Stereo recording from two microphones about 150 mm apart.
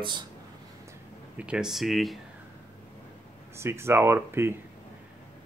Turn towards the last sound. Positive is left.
turn(degrees=-15)  # may be behind; listen again after turning